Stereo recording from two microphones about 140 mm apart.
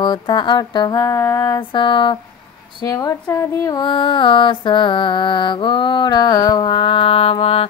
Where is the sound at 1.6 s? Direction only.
35° left (ahead or behind).